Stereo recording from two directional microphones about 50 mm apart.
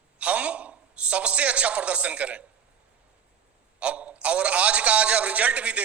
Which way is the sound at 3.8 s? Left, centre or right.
Right.